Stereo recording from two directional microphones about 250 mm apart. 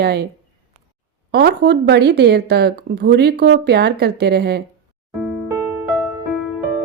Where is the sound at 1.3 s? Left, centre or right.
Right.